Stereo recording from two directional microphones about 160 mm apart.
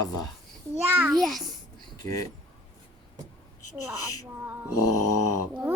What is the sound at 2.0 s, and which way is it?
Speech, 20° left (ahead or behind).